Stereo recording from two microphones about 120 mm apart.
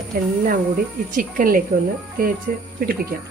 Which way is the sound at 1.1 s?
90° right.